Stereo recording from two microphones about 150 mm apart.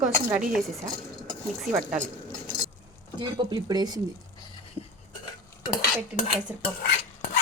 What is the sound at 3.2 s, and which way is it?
Dishes, 30° right (ahead or behind).